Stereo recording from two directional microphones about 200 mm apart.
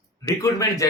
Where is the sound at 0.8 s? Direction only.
15° left (ahead or behind).